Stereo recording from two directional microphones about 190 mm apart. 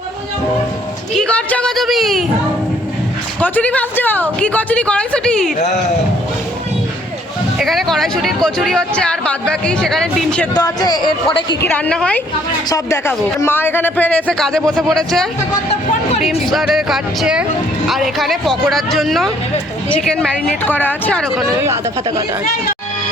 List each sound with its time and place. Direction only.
1.1 s a sound: 5° left (ahead or behind)
3.4 s speech: 10° left (ahead or behind)
5.5 s speech: 40° left (ahead or behind)
7.6 s speech: centre (ahead or behind)
10.5 s speech: 20° left (ahead or behind)
11.6 s speech: 5° left (ahead or behind)